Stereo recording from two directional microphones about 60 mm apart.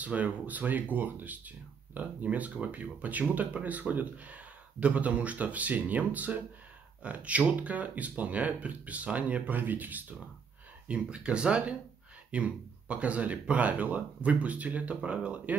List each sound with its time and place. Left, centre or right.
0.0 s speech: right
10.9 s speech: centre